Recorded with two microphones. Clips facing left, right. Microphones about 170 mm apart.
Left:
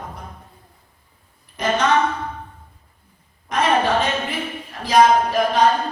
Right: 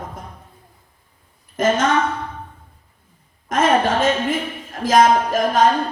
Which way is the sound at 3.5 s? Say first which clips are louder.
Right 2 dB; 45° right (ahead or behind).